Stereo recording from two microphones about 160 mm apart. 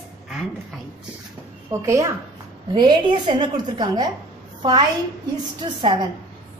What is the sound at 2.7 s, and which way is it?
A woman's voice, 30° right (ahead or behind).